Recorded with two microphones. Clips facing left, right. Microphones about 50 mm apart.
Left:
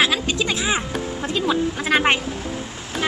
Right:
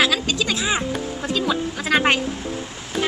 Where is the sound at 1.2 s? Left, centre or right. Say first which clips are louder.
Left 2 dB; left.